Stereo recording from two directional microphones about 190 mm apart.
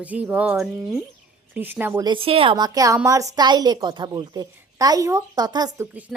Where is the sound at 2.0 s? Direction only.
25° right (ahead or behind).